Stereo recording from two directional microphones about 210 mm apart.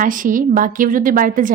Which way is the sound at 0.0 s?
40° right (ahead or behind).